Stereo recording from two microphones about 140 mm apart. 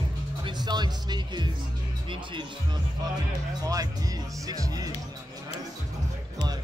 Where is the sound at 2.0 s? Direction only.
35° right (ahead or behind).